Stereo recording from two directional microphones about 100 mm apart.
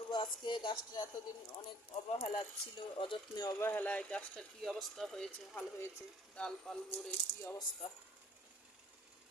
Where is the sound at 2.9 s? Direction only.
60° left (ahead or behind).